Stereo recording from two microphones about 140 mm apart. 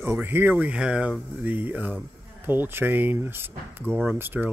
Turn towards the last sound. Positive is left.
turn(degrees=-15)  # may be behind; listen again after turning